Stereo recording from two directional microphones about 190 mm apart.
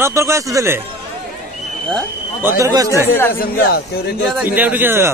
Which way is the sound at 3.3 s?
55° left (ahead or behind).